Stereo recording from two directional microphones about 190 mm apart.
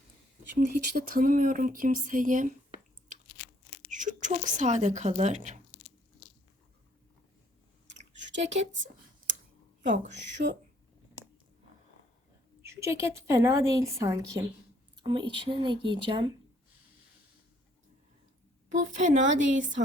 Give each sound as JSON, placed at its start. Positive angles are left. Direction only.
{"t": 0.5, "sound": "speech", "side_deg": -60}
{"t": 3.1, "sound": "crunch", "side_deg": -40}
{"t": 3.9, "sound": "speech", "side_deg": -40}
{"t": 7.9, "sound": "a sound", "side_deg": -70}
{"t": 10.4, "sound": "speech", "side_deg": -50}
{"t": 12.7, "sound": "a woman's voice", "side_deg": -15}
{"t": 18.9, "sound": "a woman's voice", "side_deg": -40}